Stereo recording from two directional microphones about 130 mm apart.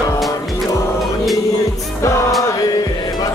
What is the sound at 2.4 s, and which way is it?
Chant, 30° left (ahead or behind).